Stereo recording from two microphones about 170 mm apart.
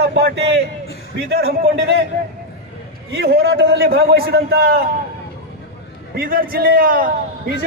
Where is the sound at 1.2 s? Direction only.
70° right (ahead or behind).